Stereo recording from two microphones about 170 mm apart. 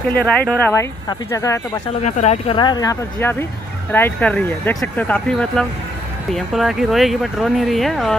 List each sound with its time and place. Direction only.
0.1 s speech: 10° left (ahead or behind)
2.0 s speech: 40° left (ahead or behind)
2.5 s speech: 25° left (ahead or behind); by 8.1 s centre (ahead or behind)